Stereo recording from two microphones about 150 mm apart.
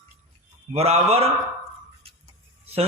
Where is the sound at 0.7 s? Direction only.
45° right (ahead or behind).